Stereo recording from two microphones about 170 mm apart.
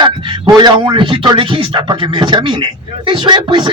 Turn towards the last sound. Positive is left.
turn(degrees=-25)  # may be behind; listen again after turning